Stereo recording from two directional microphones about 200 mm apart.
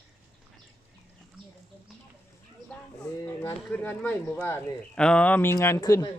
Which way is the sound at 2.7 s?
5° left (ahead or behind).